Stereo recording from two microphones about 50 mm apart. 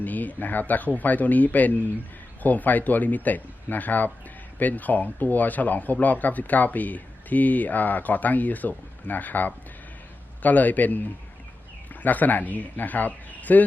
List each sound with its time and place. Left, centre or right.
0.0 s speech: left
12.0 s speech: left